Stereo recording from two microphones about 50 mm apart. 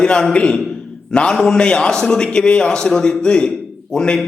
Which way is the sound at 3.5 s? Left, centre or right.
Centre.